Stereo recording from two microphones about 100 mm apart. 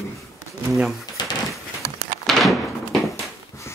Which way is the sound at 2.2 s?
Centre (ahead or behind).